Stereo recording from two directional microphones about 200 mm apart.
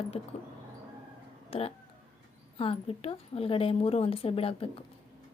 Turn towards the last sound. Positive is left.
turn(degrees=30)  # may be behind; listen again after turning